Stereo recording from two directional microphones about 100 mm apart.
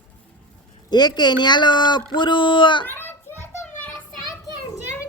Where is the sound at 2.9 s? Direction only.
20° left (ahead or behind).